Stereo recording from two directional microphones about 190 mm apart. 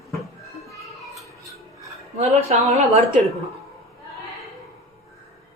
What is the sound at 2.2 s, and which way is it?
Speech, 35° right (ahead or behind).